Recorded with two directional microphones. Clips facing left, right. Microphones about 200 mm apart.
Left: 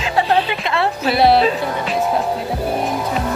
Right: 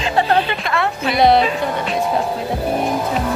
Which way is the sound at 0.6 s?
25° left (ahead or behind).